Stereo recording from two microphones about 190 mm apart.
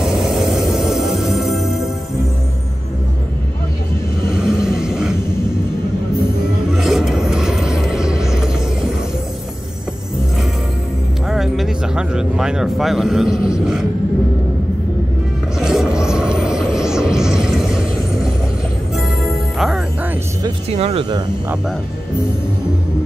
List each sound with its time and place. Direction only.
0.0 s music: centre (ahead or behind)
4.3 s vehicle: 5° right (ahead or behind)
6.7 s music: centre (ahead or behind)
11.2 s music: centre (ahead or behind)
13.5 s a sound: 5° right (ahead or behind)
15.6 s music: 5° right (ahead or behind)
16.0 s vehicle: 5° right (ahead or behind)
16.7 s music: 5° right (ahead or behind)
19.6 s music: 5° right (ahead or behind)
20.7 s speech: 30° right (ahead or behind)